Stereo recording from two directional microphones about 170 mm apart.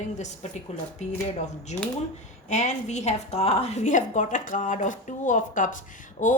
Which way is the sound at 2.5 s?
45° left (ahead or behind).